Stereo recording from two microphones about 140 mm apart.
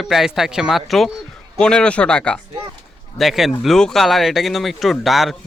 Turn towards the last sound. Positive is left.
turn(degrees=0)  # may be behind; listen again after turning